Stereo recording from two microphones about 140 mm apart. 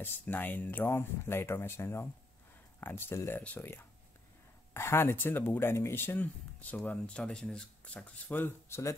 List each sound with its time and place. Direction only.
0.0 s speech: 15° left (ahead or behind)